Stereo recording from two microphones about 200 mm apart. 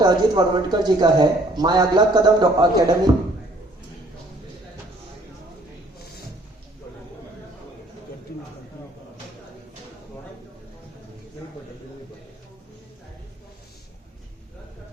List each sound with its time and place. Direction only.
0.0 s a man's voice: 20° right (ahead or behind)